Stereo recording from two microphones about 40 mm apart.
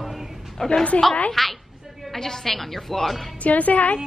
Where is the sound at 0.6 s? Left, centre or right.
Centre.